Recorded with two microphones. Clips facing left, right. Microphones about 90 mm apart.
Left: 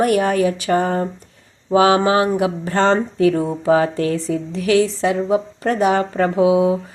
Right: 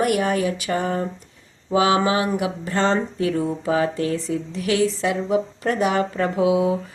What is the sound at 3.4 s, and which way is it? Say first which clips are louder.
Speech: left 4 dB; 25° left (ahead or behind).